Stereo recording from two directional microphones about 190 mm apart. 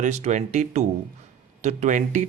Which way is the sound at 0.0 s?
40° right (ahead or behind).